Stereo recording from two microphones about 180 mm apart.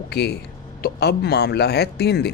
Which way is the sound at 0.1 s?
65° left (ahead or behind).